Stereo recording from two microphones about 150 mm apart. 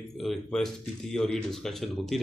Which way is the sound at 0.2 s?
Centre (ahead or behind).